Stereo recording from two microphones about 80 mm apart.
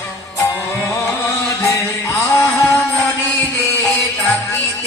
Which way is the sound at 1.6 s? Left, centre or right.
Left.